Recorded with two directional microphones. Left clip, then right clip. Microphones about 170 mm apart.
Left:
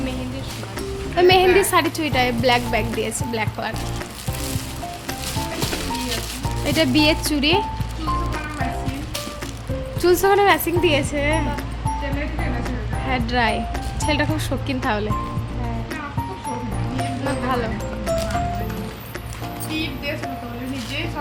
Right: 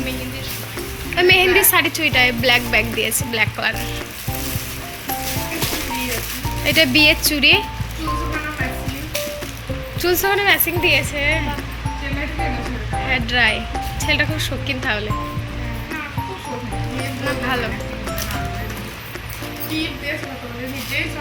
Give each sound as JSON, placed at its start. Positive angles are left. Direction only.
{"t": 1.1, "sound": "a woman's voice", "side_deg": 30}
{"t": 6.7, "sound": "a woman's voice", "side_deg": 25}
{"t": 10.0, "sound": "a woman's voice", "side_deg": 35}
{"t": 13.1, "sound": "a woman's voice", "side_deg": 30}